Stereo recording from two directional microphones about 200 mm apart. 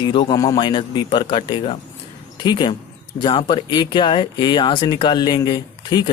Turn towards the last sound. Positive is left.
turn(degrees=20)  # may be behind; listen again after turning